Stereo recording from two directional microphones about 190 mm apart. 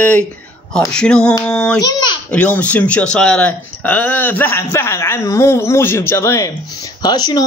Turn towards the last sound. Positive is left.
turn(degrees=20)  # may be behind; listen again after turning